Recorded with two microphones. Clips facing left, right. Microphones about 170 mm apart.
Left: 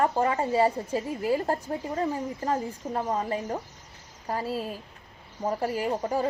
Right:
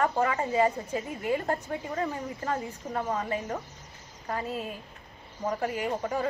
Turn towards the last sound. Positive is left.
turn(degrees=35)  # may be behind; listen again after turning